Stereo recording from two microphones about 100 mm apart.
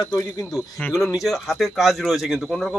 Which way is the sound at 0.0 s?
45° left (ahead or behind).